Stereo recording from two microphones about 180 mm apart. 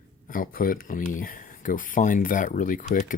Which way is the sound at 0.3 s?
50° left (ahead or behind).